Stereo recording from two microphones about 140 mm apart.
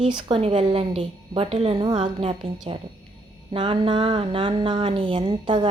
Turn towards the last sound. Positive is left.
turn(degrees=-35)  # may be behind; listen again after turning